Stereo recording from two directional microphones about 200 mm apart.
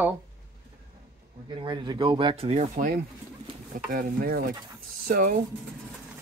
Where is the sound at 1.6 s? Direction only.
25° right (ahead or behind).